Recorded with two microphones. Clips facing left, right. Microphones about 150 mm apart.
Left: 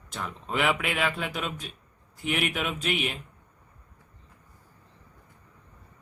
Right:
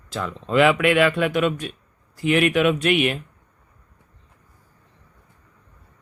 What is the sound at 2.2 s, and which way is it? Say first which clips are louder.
Speech: right 11 dB; 90° right.